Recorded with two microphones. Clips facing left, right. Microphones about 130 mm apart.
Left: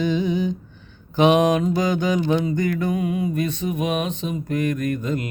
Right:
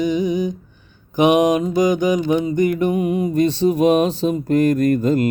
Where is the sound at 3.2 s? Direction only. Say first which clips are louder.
Right 7 dB; 30° right (ahead or behind).